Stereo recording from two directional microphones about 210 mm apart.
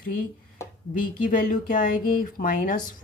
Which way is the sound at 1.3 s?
40° left (ahead or behind).